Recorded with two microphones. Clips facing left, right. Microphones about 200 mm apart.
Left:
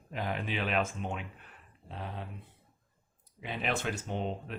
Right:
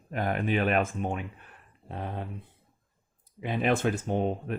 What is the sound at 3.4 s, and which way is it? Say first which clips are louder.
Speech: right 8 dB; 50° right (ahead or behind).